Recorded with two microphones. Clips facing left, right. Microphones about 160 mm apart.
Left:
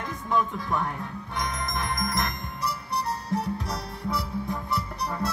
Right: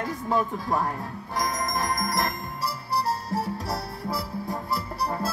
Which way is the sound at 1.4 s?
35° right (ahead or behind).